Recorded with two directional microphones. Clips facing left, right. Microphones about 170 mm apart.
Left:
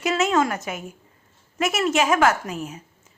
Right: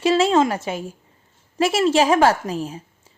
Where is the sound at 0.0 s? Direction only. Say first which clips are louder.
Right 4 dB; 30° right (ahead or behind).